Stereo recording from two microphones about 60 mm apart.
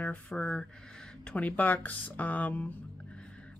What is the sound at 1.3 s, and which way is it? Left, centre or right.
Speech, left.